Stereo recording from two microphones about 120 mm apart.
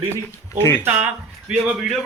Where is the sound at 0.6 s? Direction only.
20° left (ahead or behind).